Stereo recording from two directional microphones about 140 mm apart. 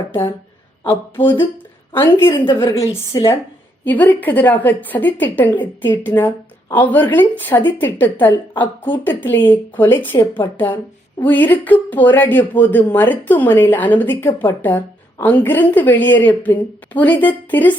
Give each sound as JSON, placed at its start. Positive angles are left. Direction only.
{"t": 1.9, "sound": "a woman's voice", "side_deg": 15}
{"t": 3.8, "sound": "speech", "side_deg": 10}